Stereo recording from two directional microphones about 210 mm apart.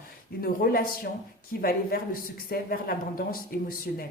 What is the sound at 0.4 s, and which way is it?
Speech, 45° left (ahead or behind).